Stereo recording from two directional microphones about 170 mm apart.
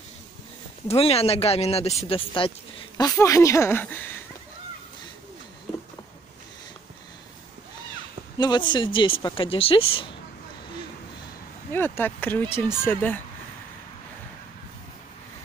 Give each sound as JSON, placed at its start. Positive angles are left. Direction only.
{"t": 0.8, "sound": "speech", "side_deg": 35}
{"t": 3.0, "sound": "speech", "side_deg": 20}
{"t": 8.4, "sound": "speech", "side_deg": 25}
{"t": 11.7, "sound": "speech", "side_deg": 10}